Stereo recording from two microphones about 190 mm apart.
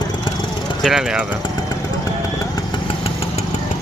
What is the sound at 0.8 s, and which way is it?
Speech, centre (ahead or behind).